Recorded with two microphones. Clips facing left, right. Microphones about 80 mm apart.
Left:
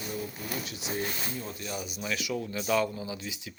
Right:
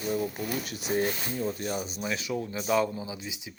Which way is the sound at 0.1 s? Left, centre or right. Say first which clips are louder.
Right 7 dB; right.